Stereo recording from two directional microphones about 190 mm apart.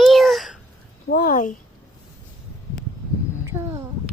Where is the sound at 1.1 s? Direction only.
45° left (ahead or behind).